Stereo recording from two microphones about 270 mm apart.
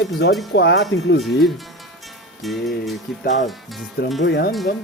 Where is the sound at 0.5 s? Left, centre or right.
Left.